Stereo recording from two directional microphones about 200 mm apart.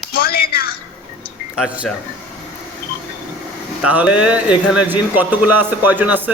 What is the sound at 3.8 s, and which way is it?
Speech, 5° right (ahead or behind).